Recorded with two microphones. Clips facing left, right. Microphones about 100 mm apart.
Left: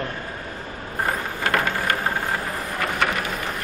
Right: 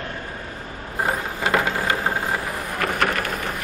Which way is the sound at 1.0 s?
20° right (ahead or behind).